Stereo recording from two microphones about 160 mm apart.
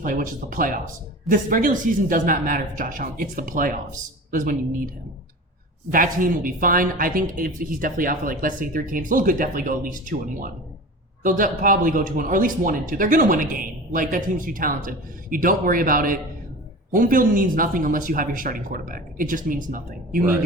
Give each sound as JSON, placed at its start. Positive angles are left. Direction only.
{"t": 0.0, "sound": "speech", "side_deg": -55}
{"t": 5.9, "sound": "speech", "side_deg": -60}